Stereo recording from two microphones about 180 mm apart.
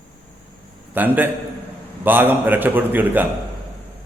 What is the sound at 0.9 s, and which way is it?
A man's voice, 10° right (ahead or behind).